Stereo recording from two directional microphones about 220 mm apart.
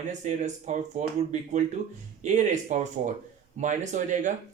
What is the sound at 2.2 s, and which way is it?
Speech, 35° right (ahead or behind).